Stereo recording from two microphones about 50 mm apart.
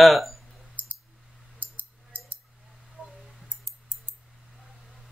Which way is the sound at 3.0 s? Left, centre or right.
Centre.